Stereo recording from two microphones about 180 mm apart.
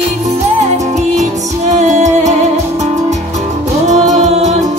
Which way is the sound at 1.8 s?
40° right (ahead or behind).